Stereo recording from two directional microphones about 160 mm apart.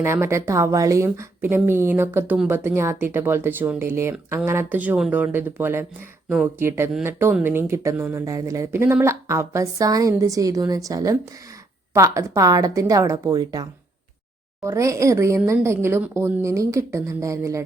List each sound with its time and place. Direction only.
0.0 s speech: 15° right (ahead or behind)